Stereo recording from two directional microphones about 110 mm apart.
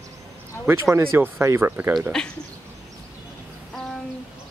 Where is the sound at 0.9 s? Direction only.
25° right (ahead or behind).